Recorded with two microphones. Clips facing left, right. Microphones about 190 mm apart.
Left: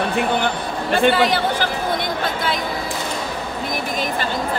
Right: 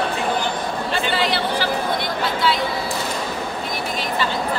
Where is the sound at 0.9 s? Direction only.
50° left (ahead or behind).